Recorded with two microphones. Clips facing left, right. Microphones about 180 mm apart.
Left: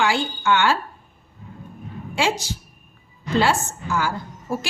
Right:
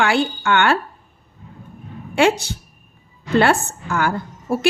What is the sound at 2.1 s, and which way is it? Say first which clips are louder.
A woman's voice: right 7 dB; 60° right (ahead or behind).